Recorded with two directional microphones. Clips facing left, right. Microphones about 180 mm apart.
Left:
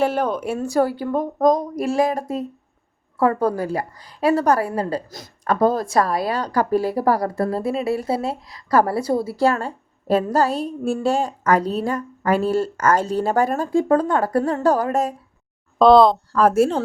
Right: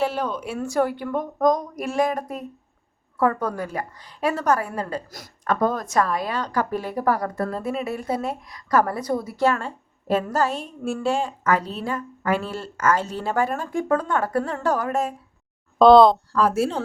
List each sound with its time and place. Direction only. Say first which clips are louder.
0.0 s a woman's voice: left 4 dB; 50° left (ahead or behind)
15.8 s speech: even; centre (ahead or behind)
16.3 s speech: left 5 dB; 50° left (ahead or behind)